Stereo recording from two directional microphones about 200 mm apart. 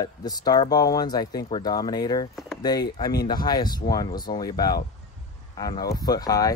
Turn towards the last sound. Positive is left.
turn(degrees=20)  # may be behind; listen again after turning